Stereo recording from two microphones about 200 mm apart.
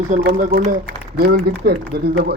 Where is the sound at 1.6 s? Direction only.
55° right (ahead or behind).